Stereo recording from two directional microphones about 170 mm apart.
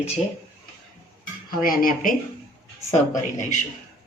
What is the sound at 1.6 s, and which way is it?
Speech, 55° left (ahead or behind).